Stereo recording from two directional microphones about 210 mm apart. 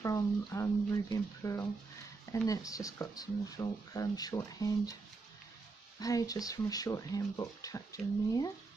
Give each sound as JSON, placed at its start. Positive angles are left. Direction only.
{"t": 0.0, "sound": "speech", "side_deg": 15}
{"t": 5.9, "sound": "speech", "side_deg": 15}